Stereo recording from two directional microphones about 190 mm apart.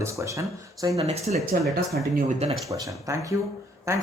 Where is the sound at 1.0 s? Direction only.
35° right (ahead or behind).